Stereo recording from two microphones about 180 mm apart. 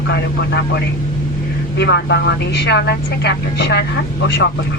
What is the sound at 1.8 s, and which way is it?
Speech, 70° left (ahead or behind).